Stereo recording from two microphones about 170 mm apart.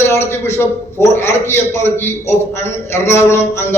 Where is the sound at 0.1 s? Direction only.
15° left (ahead or behind).